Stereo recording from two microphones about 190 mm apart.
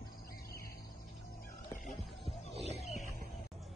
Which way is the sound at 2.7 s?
35° left (ahead or behind).